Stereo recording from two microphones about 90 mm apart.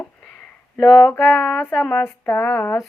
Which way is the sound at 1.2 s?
10° left (ahead or behind).